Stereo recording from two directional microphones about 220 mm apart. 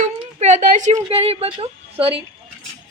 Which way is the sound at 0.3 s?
35° right (ahead or behind).